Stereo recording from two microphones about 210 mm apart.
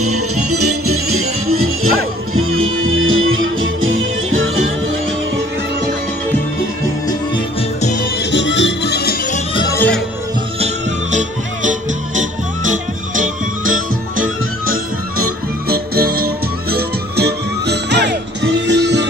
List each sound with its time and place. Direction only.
0.0 s music: 90° right
2.3 s music: 75° right (ahead or behind)
8.2 s music: 55° left (ahead or behind)
9.6 s music: 15° left (ahead or behind)
10.6 s music: 35° right (ahead or behind)
15.7 s music: 45° right (ahead or behind)